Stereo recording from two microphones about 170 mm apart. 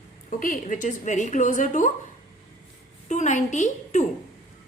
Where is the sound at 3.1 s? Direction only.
45° left (ahead or behind).